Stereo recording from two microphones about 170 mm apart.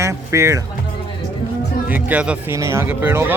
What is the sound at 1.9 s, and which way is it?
Speech, 10° right (ahead or behind).